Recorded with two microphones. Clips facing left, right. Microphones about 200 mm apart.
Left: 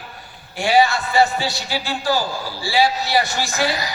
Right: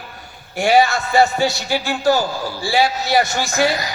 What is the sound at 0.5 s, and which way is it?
A man's voice, 45° right (ahead or behind).